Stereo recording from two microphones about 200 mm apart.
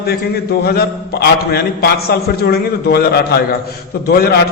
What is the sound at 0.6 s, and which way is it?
A man's voice, 55° left (ahead or behind).